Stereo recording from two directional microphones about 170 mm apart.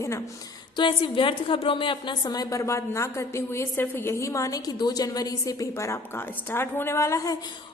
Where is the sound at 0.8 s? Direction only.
30° left (ahead or behind).